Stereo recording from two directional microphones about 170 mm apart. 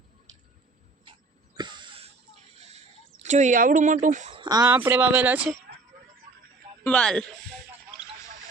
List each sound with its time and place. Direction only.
1.5 s a sound: 25° right (ahead or behind)
2.6 s a sound: 40° right (ahead or behind)
3.2 s speech: 45° right (ahead or behind)
4.3 s speech: 25° right (ahead or behind)
4.8 s speech: 10° right (ahead or behind)
6.8 s speech: 5° left (ahead or behind)